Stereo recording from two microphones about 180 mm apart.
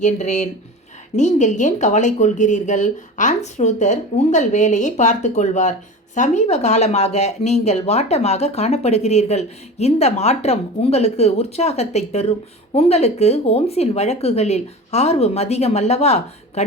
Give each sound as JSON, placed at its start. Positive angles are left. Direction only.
{"t": 0.0, "sound": "speech", "side_deg": 40}